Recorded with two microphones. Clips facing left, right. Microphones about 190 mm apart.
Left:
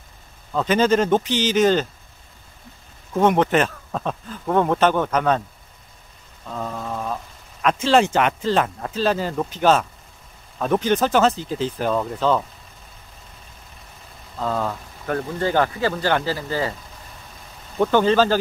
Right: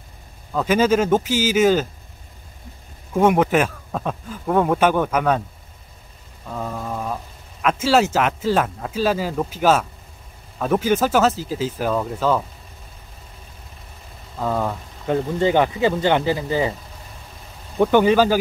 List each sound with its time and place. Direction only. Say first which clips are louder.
0.5 s speech: right 1 dB; 5° right (ahead or behind)
3.1 s speech: right 1 dB; 10° right (ahead or behind)
6.4 s a sound: right 1 dB; 5° right (ahead or behind)
7.6 s speech: even; 5° right (ahead or behind)
14.3 s speech: right 1 dB; 10° right (ahead or behind)
17.7 s speech: right 2 dB; 15° right (ahead or behind)